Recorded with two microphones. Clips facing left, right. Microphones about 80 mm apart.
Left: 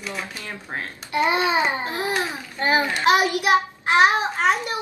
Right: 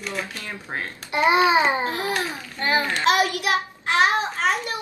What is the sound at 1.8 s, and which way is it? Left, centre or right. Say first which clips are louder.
A child's voice: even; left.